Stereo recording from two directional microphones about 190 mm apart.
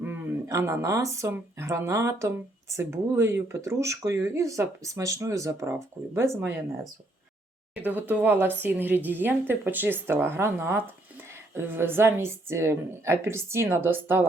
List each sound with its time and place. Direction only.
0.0 s speech: 15° right (ahead or behind)
7.8 s speech: 10° right (ahead or behind)